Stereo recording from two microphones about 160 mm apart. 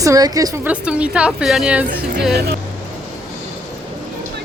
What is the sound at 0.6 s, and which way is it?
A woman's voice, 10° right (ahead or behind).